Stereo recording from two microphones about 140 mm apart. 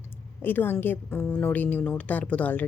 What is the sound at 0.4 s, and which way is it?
Speech, 15° left (ahead or behind).